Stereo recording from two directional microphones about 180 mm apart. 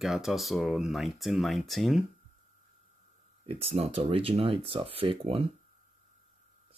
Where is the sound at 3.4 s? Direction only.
35° right (ahead or behind).